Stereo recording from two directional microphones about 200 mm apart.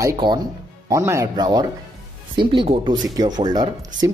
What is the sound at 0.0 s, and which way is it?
Speech, 20° right (ahead or behind).